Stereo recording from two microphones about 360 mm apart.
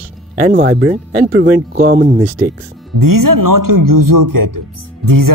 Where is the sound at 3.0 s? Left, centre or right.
Right.